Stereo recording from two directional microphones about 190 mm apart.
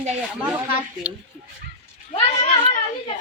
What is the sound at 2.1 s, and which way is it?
Speech, 30° left (ahead or behind).